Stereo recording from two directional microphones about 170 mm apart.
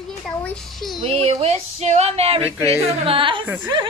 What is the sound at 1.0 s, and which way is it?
Speech, 40° right (ahead or behind).